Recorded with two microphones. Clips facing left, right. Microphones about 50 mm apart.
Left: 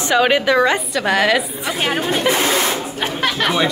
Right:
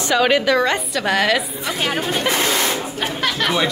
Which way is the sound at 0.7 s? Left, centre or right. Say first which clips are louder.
Left 2 dB; centre.